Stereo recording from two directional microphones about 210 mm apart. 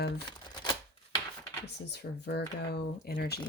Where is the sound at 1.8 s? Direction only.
50° left (ahead or behind).